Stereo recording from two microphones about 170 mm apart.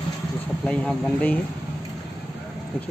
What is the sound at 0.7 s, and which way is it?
Speech, 10° left (ahead or behind).